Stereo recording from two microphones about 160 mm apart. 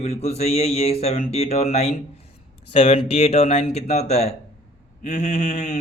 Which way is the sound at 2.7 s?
45° left (ahead or behind).